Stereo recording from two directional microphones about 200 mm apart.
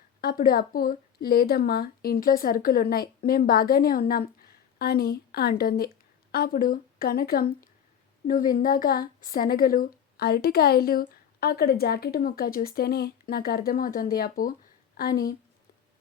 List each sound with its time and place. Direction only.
0.2 s a woman's voice: 45° left (ahead or behind)